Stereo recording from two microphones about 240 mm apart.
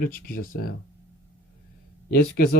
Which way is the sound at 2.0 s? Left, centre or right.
Left.